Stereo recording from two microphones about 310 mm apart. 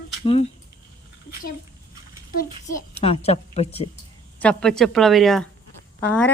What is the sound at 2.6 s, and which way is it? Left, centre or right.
A woman's voice, centre.